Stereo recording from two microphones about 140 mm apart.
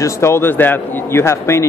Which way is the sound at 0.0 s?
20° left (ahead or behind).